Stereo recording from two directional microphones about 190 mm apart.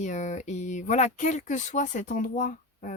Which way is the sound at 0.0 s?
40° left (ahead or behind).